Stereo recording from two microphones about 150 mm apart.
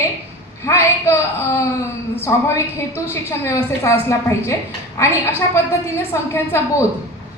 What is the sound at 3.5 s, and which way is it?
A woman's voice, 15° left (ahead or behind).